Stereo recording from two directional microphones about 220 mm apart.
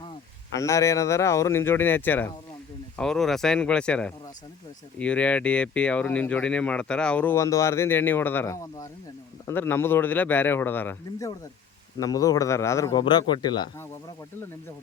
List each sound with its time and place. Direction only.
0.5 s speech: 15° left (ahead or behind)